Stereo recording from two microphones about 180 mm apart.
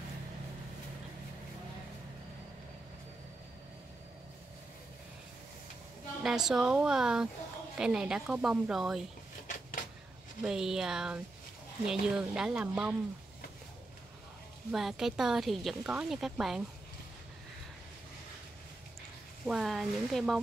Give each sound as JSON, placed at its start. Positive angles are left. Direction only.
{"t": 6.2, "sound": "speech", "side_deg": 0}
{"t": 9.5, "sound": "a sound", "side_deg": 50}
{"t": 10.4, "sound": "speech", "side_deg": -5}
{"t": 14.7, "sound": "speech", "side_deg": 0}
{"t": 19.4, "sound": "speech", "side_deg": 0}